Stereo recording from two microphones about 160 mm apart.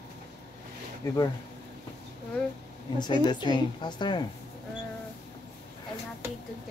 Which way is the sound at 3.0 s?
30° left (ahead or behind).